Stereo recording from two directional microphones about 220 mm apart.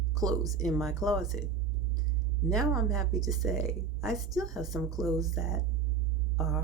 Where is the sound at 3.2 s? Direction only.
15° right (ahead or behind).